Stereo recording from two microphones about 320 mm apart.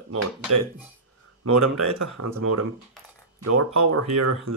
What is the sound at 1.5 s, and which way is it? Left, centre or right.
Speech, right.